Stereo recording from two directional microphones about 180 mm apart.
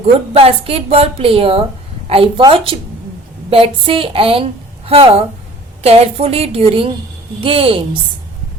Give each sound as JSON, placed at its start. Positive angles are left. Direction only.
{"t": 0.0, "sound": "a woman's voice", "side_deg": -30}